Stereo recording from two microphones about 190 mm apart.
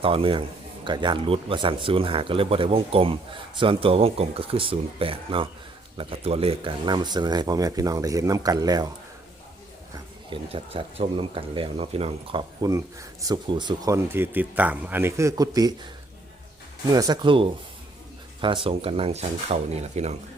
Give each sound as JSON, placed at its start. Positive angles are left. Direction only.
{"t": 0.0, "sound": "speech", "side_deg": -30}
{"t": 10.2, "sound": "speech", "side_deg": -30}
{"t": 16.9, "sound": "speech", "side_deg": -20}